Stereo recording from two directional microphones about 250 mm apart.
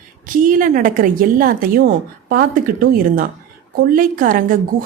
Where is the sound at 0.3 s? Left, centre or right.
Right.